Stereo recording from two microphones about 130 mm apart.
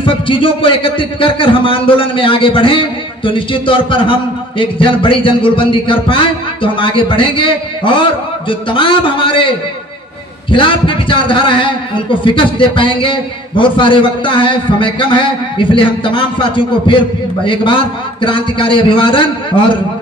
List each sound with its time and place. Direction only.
0.0 s a man's voice: 40° left (ahead or behind)
10.5 s a man's voice: 40° left (ahead or behind)